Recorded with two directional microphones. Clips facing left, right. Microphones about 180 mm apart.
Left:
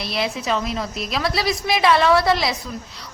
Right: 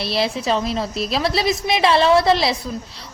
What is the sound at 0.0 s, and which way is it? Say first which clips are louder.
A woman's voice: right 3 dB; 30° right (ahead or behind).